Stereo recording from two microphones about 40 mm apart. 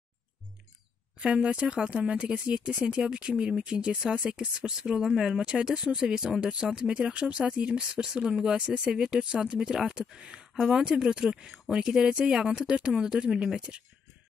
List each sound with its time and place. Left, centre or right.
1.2 s speech: right
3.9 s speech: centre; by 13.8 s right